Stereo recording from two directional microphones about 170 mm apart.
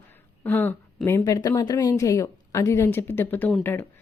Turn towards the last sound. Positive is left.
turn(degrees=15)  # may be behind; listen again after turning